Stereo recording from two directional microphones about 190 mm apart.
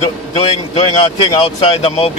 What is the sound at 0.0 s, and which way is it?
A man's voice, 30° left (ahead or behind).